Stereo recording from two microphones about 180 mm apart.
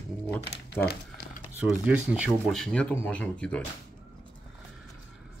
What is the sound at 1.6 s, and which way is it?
Speech, 5° right (ahead or behind).